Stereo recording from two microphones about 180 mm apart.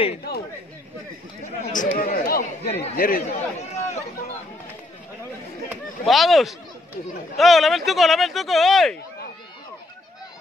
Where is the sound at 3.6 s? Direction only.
35° left (ahead or behind).